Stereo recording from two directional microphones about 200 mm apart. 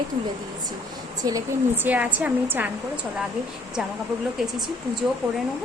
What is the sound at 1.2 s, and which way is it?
Speech, 20° right (ahead or behind).